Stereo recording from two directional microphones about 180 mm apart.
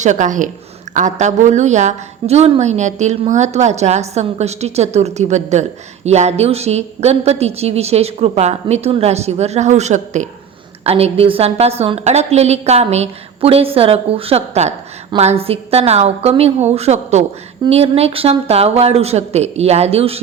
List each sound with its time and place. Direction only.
0.0 s a woman's voice: 45° right (ahead or behind)